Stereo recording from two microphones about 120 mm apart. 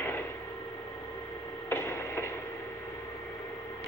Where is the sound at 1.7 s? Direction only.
20° left (ahead or behind).